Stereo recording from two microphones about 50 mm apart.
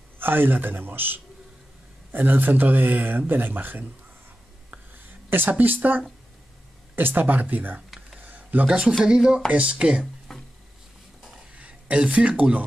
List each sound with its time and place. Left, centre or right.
0.2 s speech: right
4.9 s speech: right
8.2 s a sound: right
8.6 s speech: centre
9.5 s speech: right
10.3 s a sound: centre
11.5 s speech: right